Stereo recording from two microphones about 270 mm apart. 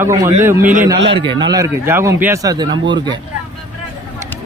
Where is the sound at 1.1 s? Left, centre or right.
Centre.